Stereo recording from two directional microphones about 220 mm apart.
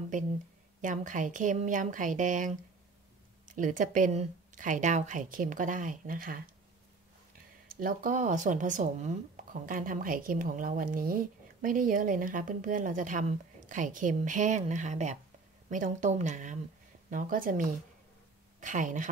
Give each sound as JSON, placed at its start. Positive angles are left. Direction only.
{"t": 0.1, "sound": "speech", "side_deg": -35}
{"t": 7.8, "sound": "speech", "side_deg": -35}